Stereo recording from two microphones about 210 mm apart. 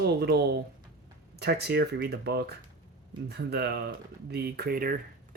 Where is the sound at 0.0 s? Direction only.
50° right (ahead or behind).